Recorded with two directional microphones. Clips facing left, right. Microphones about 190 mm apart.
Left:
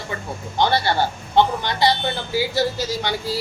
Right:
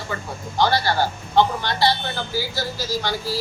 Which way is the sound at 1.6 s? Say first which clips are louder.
Left 1 dB; 20° left (ahead or behind).